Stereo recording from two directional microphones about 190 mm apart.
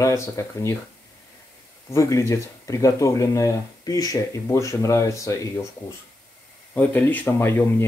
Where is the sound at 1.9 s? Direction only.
15° left (ahead or behind).